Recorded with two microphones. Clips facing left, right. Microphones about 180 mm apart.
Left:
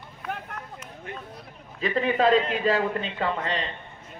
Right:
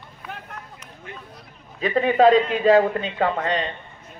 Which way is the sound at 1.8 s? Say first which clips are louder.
Right 6 dB; 45° right (ahead or behind).